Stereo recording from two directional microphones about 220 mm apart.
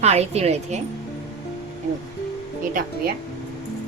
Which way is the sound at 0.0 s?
30° right (ahead or behind).